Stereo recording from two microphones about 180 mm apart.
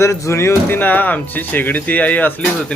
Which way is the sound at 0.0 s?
15° left (ahead or behind).